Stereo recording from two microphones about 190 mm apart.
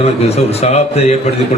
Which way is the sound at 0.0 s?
35° left (ahead or behind).